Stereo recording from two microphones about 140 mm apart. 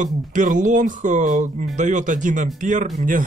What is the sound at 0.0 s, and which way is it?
Speech, 65° right (ahead or behind).